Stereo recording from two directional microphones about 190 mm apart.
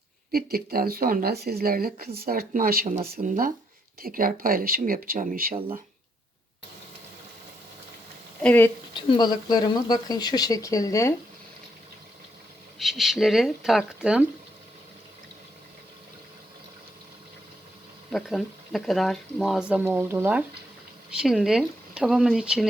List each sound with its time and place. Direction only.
0.3 s speech: 50° right (ahead or behind)
8.4 s speech: 10° left (ahead or behind)
9.0 s speech: 25° left (ahead or behind)
12.8 s speech: centre (ahead or behind)
18.1 s speech: centre (ahead or behind)